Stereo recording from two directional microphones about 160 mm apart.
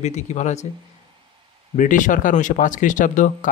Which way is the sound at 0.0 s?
45° left (ahead or behind).